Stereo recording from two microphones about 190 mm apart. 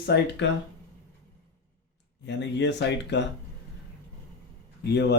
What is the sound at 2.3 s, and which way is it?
Speech, 65° left (ahead or behind).